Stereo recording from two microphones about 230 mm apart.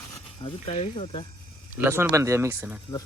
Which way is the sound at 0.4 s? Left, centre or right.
Left.